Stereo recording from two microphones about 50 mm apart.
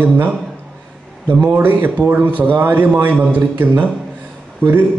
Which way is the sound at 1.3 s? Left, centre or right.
Right.